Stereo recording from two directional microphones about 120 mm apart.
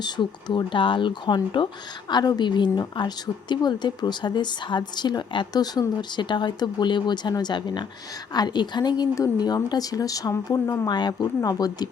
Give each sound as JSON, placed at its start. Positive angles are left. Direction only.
{"t": 0.0, "sound": "speech", "side_deg": 40}